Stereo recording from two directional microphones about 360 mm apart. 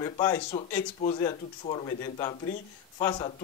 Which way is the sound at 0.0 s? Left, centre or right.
Centre.